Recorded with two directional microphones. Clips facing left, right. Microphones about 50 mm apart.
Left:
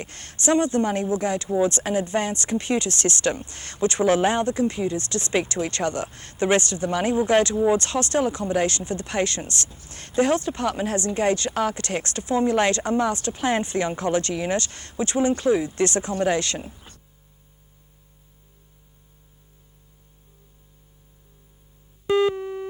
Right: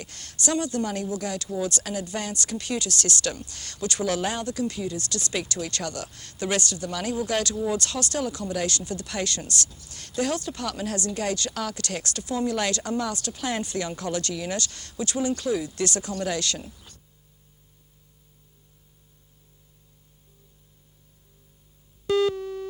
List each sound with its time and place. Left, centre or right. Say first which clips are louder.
0.0 s speech: left 5 dB; left
22.0 s music: left 2 dB; left